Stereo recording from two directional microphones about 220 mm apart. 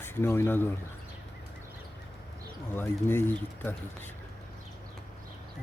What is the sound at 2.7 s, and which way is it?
Speech, 10° left (ahead or behind).